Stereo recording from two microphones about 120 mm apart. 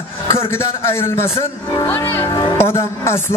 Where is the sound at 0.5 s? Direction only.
20° left (ahead or behind).